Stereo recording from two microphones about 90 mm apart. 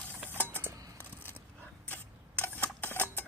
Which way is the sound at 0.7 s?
45° right (ahead or behind).